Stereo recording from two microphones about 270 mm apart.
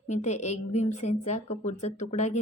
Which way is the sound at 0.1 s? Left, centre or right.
Left.